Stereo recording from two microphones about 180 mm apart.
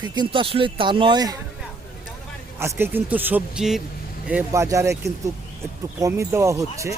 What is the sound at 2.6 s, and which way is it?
Speech, 15° right (ahead or behind).